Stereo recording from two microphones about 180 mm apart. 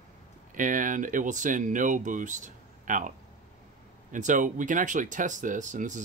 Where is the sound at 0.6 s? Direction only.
45° right (ahead or behind).